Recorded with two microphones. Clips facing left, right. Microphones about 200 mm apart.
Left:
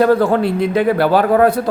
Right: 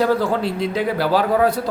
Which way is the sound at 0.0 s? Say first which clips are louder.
Left 6 dB; 55° left (ahead or behind).